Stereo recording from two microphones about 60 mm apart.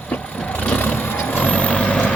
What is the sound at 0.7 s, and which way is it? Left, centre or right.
Vehicle, left.